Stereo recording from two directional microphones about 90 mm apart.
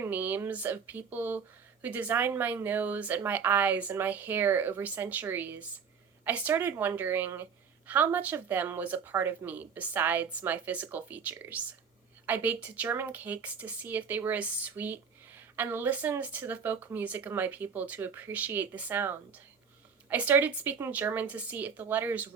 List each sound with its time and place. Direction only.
0.0 s speech: 20° right (ahead or behind)